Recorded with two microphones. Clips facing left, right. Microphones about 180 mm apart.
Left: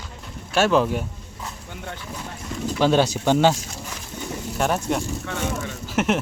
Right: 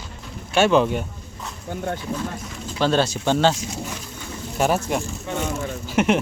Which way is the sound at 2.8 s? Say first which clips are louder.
Left 1 dB; 15° left (ahead or behind).